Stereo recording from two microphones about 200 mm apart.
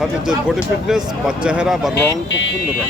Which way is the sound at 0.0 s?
Centre (ahead or behind).